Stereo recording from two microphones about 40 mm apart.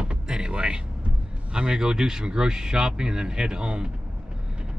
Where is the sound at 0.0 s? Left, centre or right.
Right.